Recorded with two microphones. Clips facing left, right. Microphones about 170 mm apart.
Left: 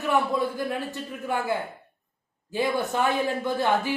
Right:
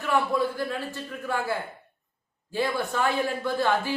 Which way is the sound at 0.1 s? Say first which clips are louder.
Even; 20° left (ahead or behind).